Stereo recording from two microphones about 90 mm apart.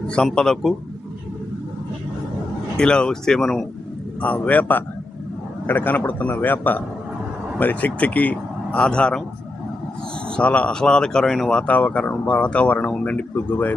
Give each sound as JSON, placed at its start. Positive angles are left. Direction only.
{"t": 0.3, "sound": "a man's voice", "side_deg": 5}
{"t": 2.7, "sound": "speech", "side_deg": 10}
{"t": 4.2, "sound": "speech", "side_deg": 15}
{"t": 10.2, "sound": "speech", "side_deg": 10}